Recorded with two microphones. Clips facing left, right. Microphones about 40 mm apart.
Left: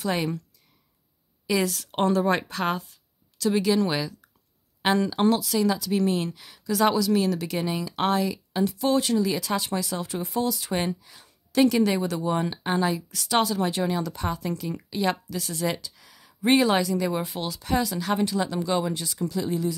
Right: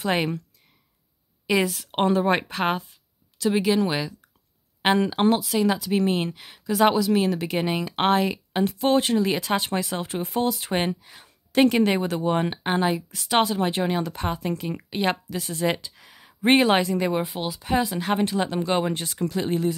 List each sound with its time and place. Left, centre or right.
0.0 s speech: right
1.5 s speech: right
4.8 s speech: right
17.2 s speech: centre
17.7 s speech: right